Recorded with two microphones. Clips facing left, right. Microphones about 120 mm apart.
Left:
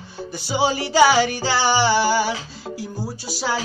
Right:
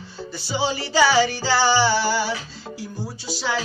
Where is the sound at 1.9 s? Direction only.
50° left (ahead or behind).